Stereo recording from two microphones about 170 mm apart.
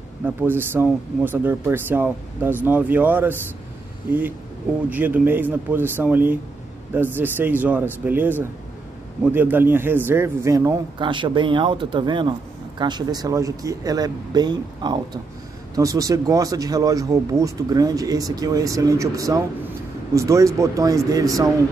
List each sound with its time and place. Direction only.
0.2 s speech: 10° right (ahead or behind)
4.8 s a man's voice: 10° right (ahead or behind)